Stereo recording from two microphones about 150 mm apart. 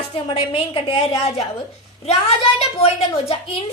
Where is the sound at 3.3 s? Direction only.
40° left (ahead or behind).